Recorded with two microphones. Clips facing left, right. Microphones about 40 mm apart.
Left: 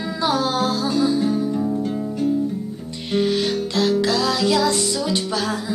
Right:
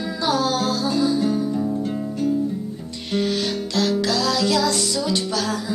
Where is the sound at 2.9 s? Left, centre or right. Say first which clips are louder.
Left 3 dB; centre.